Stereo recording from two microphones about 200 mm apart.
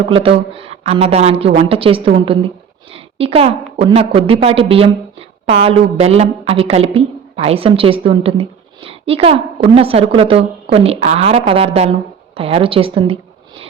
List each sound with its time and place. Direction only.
0.1 s a woman's voice: 25° right (ahead or behind)